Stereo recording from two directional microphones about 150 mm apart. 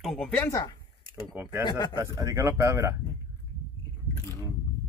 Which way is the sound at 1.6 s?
30° left (ahead or behind).